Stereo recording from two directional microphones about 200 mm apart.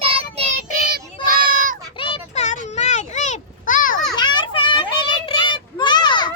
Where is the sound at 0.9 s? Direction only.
45° right (ahead or behind).